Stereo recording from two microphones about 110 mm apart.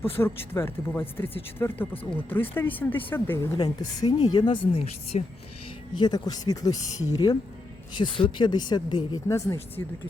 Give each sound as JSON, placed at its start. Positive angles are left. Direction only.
{"t": 0.0, "sound": "speech", "side_deg": 20}
{"t": 3.5, "sound": "speech", "side_deg": 35}
{"t": 4.8, "sound": "a woman's voice", "side_deg": 70}
{"t": 5.9, "sound": "speech", "side_deg": 40}
{"t": 7.9, "sound": "speech", "side_deg": 50}
{"t": 9.2, "sound": "speech", "side_deg": 25}